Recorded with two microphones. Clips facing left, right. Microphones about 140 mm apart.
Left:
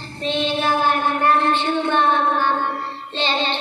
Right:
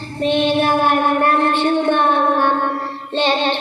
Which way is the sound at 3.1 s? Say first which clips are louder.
Right 6 dB; 55° right (ahead or behind).